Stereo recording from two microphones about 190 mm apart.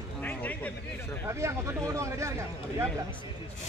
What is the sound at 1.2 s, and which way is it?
Speech, 15° right (ahead or behind).